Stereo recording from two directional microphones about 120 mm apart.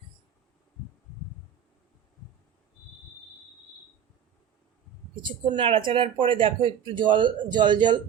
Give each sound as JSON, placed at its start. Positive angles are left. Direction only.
{"t": 5.2, "sound": "speech", "side_deg": -40}